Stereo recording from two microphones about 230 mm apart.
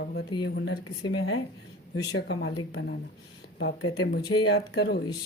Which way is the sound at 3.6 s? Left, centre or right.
Left.